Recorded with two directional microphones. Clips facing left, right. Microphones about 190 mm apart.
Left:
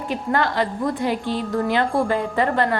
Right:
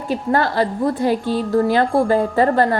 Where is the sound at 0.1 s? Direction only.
40° right (ahead or behind).